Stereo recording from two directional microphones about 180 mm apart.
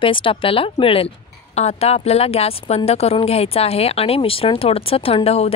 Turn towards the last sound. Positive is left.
turn(degrees=35)  # may be behind; listen again after turning